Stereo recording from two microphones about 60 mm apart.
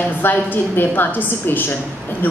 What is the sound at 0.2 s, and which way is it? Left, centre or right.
A woman's voice, left.